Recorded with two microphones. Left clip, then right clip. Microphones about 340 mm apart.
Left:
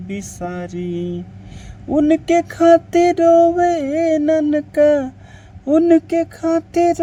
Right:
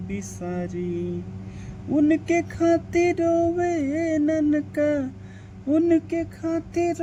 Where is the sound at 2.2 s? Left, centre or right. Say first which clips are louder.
Left 9 dB; left.